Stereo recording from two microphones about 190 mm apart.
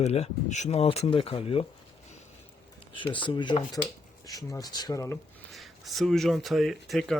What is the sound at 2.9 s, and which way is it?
Speech, 25° left (ahead or behind).